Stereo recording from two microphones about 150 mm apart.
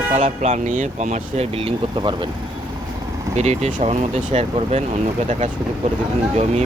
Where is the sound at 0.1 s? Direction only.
55° right (ahead or behind); by 2.3 s 30° right (ahead or behind).